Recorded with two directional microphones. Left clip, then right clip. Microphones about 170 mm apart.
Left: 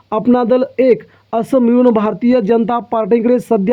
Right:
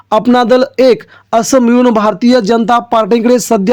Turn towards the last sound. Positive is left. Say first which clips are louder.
# right 4 dB
turn(degrees=-35)  # may be behind; listen again after turning